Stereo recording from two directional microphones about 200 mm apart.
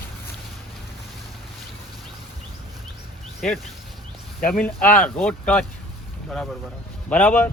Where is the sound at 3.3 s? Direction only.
5° left (ahead or behind).